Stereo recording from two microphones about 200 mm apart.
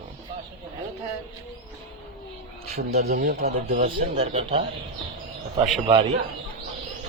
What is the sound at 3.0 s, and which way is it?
Speech, 50° right (ahead or behind).